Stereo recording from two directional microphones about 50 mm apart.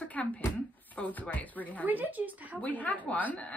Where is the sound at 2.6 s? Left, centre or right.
Left.